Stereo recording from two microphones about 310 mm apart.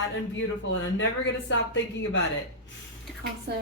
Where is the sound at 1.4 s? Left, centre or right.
Left.